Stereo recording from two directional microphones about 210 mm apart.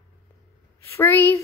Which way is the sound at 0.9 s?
10° left (ahead or behind).